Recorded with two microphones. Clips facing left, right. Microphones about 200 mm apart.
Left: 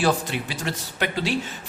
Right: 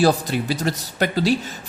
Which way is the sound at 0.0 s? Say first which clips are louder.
Right 5 dB; 40° right (ahead or behind).